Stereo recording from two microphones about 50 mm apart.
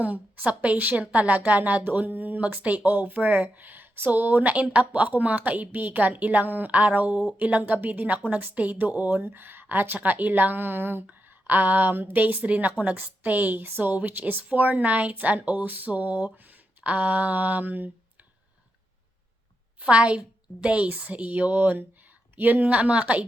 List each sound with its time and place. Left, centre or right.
0.0 s speech: right
19.8 s a woman's voice: right